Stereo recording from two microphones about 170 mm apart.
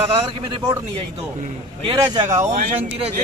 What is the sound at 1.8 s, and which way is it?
Speech, 30° right (ahead or behind).